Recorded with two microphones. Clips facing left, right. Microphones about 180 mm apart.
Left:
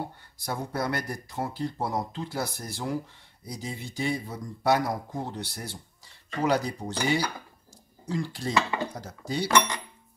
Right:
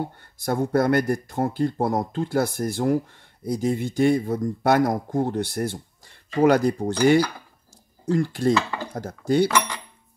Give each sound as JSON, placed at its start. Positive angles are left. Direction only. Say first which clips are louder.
{"t": 0.2, "sound": "speech", "louder": "right 9 dB", "side_deg": -55}